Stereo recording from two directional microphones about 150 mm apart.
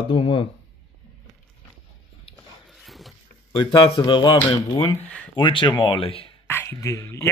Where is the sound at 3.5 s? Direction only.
35° left (ahead or behind).